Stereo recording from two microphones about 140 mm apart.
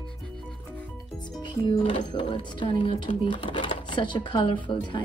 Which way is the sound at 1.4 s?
30° left (ahead or behind).